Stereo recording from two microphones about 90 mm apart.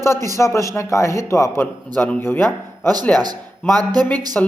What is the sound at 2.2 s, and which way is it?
Speech, 25° left (ahead or behind).